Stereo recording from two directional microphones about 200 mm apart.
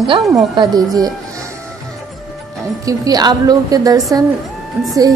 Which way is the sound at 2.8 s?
20° right (ahead or behind).